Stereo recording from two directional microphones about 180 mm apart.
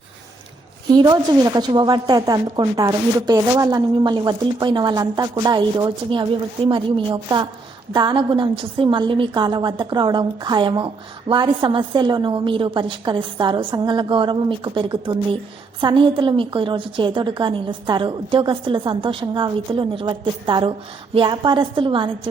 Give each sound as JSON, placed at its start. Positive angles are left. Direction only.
{"t": 0.9, "sound": "a woman's voice", "side_deg": -20}